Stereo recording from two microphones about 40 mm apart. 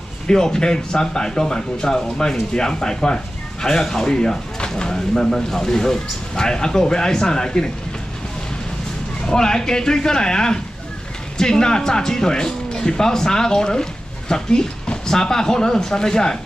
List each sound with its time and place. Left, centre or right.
0.3 s speech: centre
9.2 s speech: centre